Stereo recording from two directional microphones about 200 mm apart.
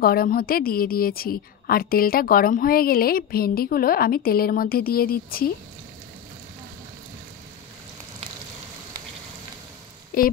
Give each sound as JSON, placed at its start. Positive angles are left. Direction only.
{"t": 0.0, "sound": "a woman's voice", "side_deg": 45}
{"t": 10.1, "sound": "speech", "side_deg": 45}